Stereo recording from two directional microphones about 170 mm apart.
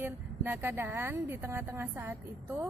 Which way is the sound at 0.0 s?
10° right (ahead or behind).